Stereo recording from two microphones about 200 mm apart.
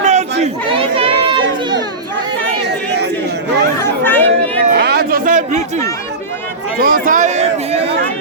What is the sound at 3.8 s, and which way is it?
Chatter, 10° left (ahead or behind).